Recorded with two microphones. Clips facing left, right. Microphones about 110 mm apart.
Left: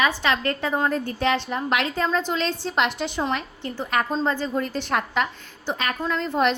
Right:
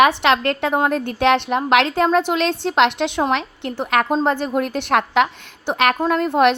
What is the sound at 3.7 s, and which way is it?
A woman's voice, 70° right (ahead or behind).